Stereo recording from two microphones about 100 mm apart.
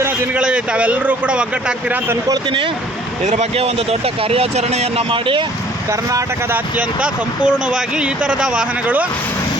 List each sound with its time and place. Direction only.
0.3 s speech: 10° right (ahead or behind)
3.5 s speech: 80° right; by 5.5 s 60° right (ahead or behind)
5.9 s speech: 35° right (ahead or behind)
6.5 s speech: 15° right (ahead or behind)